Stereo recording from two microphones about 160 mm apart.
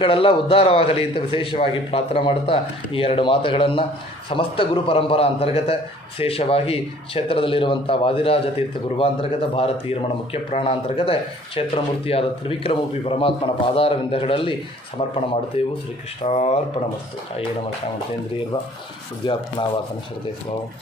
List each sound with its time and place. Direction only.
0.0 s a man's voice: 35° left (ahead or behind)
19.2 s speech: 30° left (ahead or behind)